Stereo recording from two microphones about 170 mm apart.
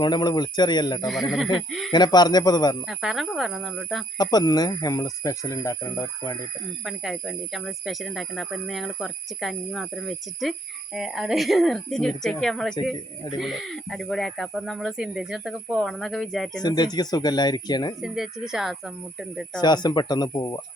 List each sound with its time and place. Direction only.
0.0 s speech: 25° left (ahead or behind)
1.5 s speech: centre (ahead or behind)
1.9 s speech: 25° left (ahead or behind)
2.8 s speech: centre (ahead or behind)
4.2 s speech: 25° left (ahead or behind)
6.8 s speech: centre (ahead or behind)
16.6 s speech: 25° left (ahead or behind)
18.0 s speech: 5° right (ahead or behind)
19.6 s speech: 25° left (ahead or behind)